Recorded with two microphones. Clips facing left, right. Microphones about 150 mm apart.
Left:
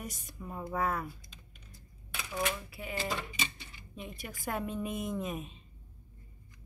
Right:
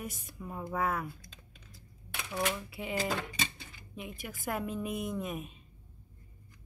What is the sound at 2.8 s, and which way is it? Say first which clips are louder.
Speech: right 3 dB; 20° right (ahead or behind).